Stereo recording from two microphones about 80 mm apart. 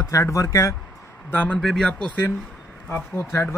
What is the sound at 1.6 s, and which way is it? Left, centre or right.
Speech, centre.